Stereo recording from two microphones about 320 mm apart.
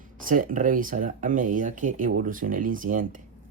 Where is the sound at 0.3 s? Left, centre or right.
Right.